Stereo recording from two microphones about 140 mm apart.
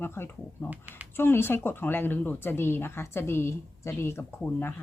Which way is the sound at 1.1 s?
15° left (ahead or behind).